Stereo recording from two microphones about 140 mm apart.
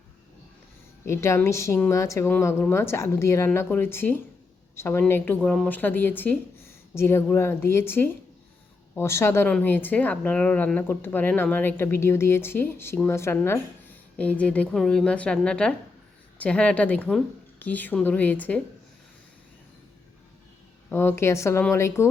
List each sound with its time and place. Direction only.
1.0 s speech: 20° left (ahead or behind)
20.9 s speech: 15° left (ahead or behind)